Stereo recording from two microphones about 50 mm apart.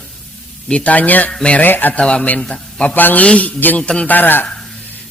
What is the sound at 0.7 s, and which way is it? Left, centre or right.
A man's voice, left.